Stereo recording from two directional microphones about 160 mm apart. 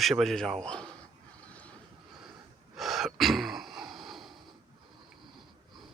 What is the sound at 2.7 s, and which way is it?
Sneeze, centre (ahead or behind).